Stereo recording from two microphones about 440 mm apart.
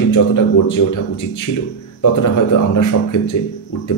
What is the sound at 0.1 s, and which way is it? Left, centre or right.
A man's voice, left.